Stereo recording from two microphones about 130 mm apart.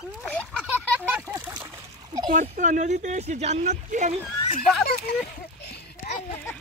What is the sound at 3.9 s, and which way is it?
Speech, 75° right (ahead or behind).